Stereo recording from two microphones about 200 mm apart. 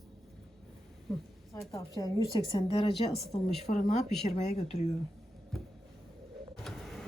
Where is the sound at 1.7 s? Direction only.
20° left (ahead or behind).